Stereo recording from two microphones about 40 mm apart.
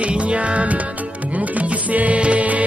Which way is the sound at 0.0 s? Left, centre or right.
Right.